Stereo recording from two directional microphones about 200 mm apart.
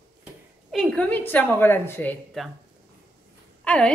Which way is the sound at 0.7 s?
Centre (ahead or behind).